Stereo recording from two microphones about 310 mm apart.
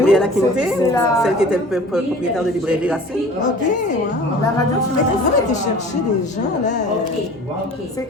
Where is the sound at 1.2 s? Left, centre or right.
Centre.